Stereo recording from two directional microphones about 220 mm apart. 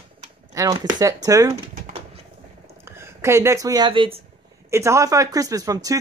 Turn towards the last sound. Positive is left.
turn(degrees=-15)  # may be behind; listen again after turning